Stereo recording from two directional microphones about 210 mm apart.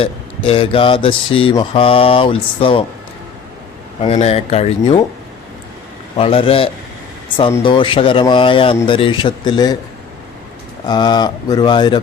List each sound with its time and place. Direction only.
0.0 s speech: 25° left (ahead or behind)
4.0 s speech: 30° left (ahead or behind)
6.1 s speech: 25° left (ahead or behind)
10.8 s speech: 20° left (ahead or behind)